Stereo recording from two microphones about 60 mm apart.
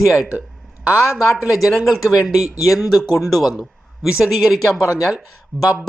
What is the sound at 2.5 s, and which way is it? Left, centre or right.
Speech, left.